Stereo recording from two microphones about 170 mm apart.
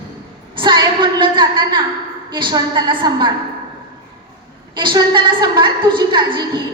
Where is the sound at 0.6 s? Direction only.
30° right (ahead or behind).